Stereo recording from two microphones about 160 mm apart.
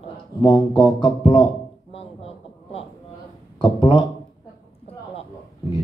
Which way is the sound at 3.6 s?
30° left (ahead or behind).